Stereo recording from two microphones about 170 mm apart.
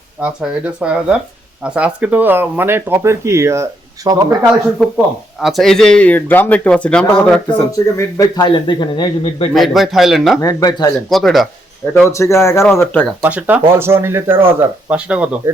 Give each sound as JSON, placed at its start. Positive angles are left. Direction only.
{"t": 0.2, "sound": "speech", "side_deg": -5}
{"t": 5.4, "sound": "speech", "side_deg": 0}
{"t": 8.2, "sound": "a man's voice", "side_deg": 25}
{"t": 9.6, "sound": "speech", "side_deg": 0}
{"t": 10.4, "sound": "a man's voice", "side_deg": 20}
{"t": 11.1, "sound": "speech", "side_deg": 0}
{"t": 12.0, "sound": "speech", "side_deg": 15}
{"t": 13.2, "sound": "speech", "side_deg": -10}